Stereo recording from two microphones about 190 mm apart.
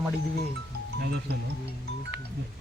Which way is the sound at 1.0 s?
60° right (ahead or behind).